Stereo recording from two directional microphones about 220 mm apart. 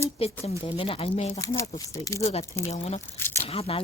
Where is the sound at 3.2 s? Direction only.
10° left (ahead or behind).